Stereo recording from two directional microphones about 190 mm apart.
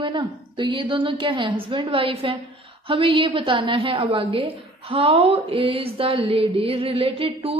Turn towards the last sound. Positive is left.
turn(degrees=-30)  # may be behind; listen again after turning